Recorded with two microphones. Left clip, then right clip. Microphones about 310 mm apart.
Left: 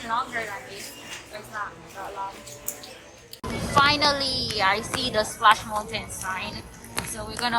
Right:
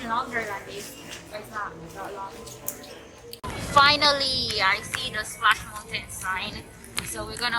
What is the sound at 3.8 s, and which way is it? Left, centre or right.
A woman's voice, centre.